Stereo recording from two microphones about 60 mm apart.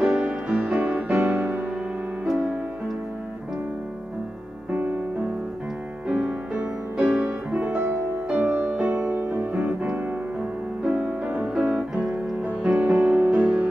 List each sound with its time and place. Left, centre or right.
0.0 s music: centre
0.7 s music: right
6.0 s music: centre
12.4 s music: right